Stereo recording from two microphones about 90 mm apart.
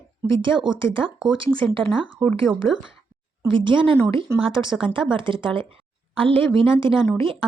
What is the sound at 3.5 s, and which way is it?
Speech, 70° right (ahead or behind).